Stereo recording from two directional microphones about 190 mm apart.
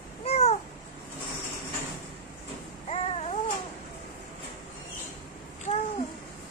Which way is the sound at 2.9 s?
35° left (ahead or behind).